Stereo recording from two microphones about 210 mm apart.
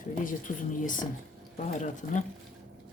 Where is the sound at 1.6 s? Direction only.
35° left (ahead or behind).